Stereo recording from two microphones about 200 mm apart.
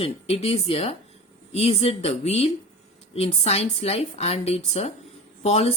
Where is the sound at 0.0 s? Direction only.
30° left (ahead or behind).